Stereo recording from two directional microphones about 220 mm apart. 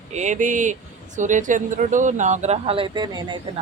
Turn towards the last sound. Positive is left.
turn(degrees=-20)  # may be behind; listen again after turning